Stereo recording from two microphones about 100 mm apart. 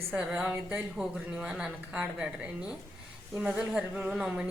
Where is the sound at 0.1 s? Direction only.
5° right (ahead or behind).